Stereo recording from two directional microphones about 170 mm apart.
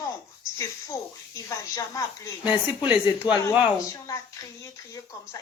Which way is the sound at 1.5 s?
20° left (ahead or behind).